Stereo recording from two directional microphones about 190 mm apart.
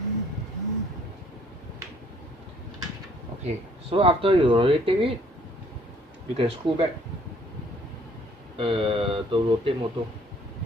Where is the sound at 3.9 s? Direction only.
30° right (ahead or behind).